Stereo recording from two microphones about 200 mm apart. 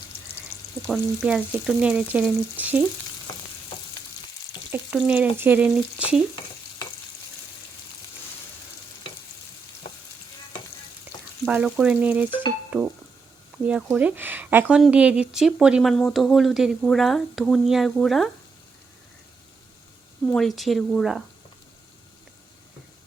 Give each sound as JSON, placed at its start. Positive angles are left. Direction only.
{"t": 0.9, "sound": "frying", "side_deg": -5}
{"t": 3.3, "sound": "frying", "side_deg": 20}
{"t": 4.7, "sound": "frying", "side_deg": -5}
{"t": 6.0, "sound": "stir", "side_deg": -5}
{"t": 11.4, "sound": "frying", "side_deg": -5}
{"t": 13.7, "sound": "speech", "side_deg": -5}
{"t": 20.2, "sound": "speech", "side_deg": 5}